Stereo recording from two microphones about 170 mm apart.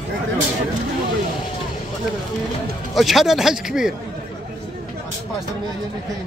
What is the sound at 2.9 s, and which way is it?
Speech, centre (ahead or behind).